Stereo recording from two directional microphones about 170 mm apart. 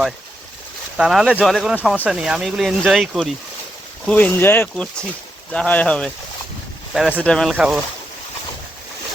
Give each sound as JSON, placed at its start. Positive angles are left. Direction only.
{"t": 0.9, "sound": "speech", "side_deg": -5}